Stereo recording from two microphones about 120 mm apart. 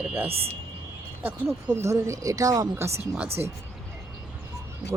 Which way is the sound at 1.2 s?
20° right (ahead or behind).